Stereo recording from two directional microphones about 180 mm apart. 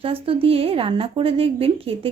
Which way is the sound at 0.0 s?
30° right (ahead or behind).